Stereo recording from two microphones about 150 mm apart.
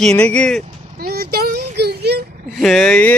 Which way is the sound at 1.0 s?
90° right.